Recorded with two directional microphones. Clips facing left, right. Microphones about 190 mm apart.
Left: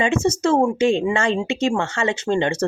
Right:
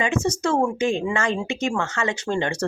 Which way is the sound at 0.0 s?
25° left (ahead or behind).